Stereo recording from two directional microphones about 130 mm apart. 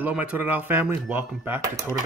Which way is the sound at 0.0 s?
10° right (ahead or behind).